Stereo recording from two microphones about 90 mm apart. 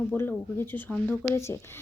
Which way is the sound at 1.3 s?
30° left (ahead or behind).